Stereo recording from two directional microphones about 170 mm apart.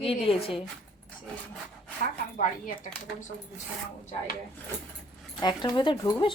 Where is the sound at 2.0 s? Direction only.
50° left (ahead or behind).